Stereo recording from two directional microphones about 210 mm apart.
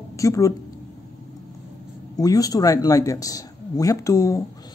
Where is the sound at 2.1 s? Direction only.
15° left (ahead or behind).